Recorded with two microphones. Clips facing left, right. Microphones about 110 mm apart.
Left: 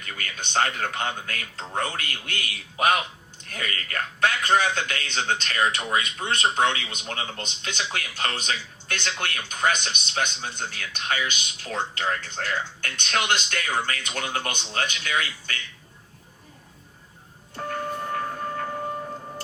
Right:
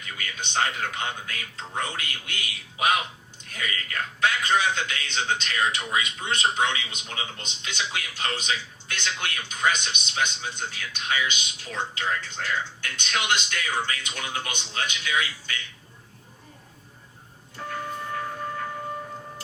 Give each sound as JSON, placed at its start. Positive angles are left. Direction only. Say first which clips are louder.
{"t": 0.0, "sound": "a man's voice", "louder": "even", "side_deg": 50}
{"t": 17.5, "sound": "music", "louder": "left 3 dB", "side_deg": 45}